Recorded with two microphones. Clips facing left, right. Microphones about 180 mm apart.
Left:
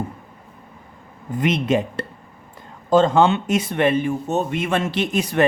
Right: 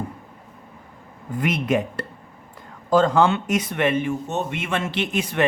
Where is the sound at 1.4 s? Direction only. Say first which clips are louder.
Left 2 dB; 25° left (ahead or behind).